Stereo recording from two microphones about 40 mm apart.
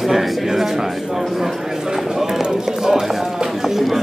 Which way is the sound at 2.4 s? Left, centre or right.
Centre.